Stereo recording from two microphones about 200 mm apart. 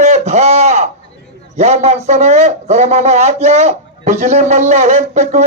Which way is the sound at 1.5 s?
35° right (ahead or behind).